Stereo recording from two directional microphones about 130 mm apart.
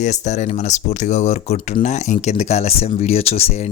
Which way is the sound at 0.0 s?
65° left (ahead or behind).